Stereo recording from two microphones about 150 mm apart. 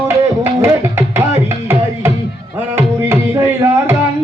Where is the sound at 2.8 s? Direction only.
15° right (ahead or behind).